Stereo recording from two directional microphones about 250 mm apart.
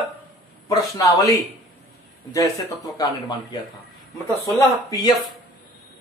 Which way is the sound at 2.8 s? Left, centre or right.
Centre.